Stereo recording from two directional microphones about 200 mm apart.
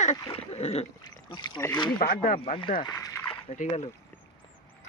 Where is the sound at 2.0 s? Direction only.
45° left (ahead or behind).